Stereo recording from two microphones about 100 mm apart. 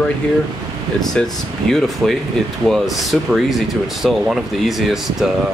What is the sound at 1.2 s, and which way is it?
Speech, 10° left (ahead or behind).